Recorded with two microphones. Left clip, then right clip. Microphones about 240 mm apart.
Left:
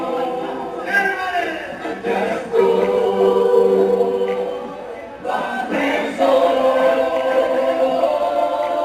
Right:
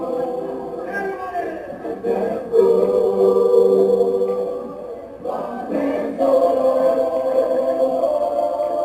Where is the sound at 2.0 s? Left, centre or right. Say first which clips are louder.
Left 1 dB; centre.